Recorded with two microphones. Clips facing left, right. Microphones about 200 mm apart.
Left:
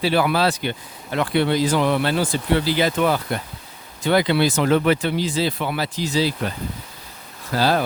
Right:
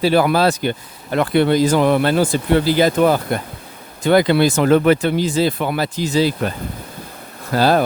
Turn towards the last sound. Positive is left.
turn(degrees=-50)  # may be behind; listen again after turning